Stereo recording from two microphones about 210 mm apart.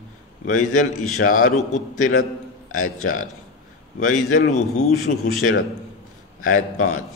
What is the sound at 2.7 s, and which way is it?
Speech, 90° left.